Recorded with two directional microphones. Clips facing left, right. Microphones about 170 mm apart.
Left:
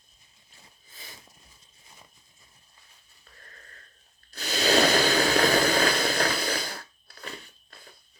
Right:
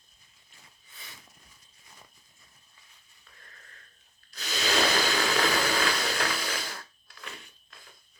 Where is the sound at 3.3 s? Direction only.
35° left (ahead or behind).